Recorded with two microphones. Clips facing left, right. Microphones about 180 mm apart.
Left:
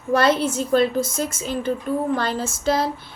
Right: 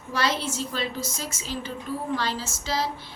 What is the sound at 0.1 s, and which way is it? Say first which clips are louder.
A woman's voice: left 9 dB; 55° left (ahead or behind).